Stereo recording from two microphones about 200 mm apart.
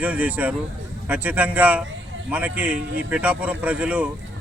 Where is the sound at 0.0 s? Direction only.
5° right (ahead or behind).